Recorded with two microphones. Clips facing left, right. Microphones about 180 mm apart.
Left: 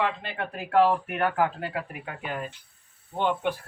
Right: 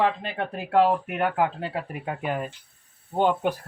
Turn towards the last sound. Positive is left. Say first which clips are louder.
# right 4 dB
turn(degrees=-40)  # may be behind; listen again after turning